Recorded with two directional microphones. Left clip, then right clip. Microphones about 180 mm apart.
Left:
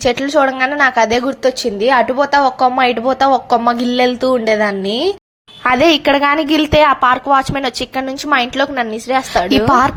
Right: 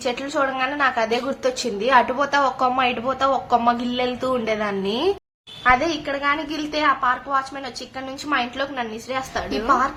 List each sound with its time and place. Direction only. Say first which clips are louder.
0.0 s a woman's voice: left 10 dB; 40° left (ahead or behind)
5.6 s a woman's voice: left 8 dB; 55° left (ahead or behind)